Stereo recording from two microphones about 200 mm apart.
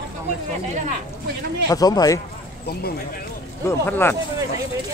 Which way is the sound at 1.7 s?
20° left (ahead or behind).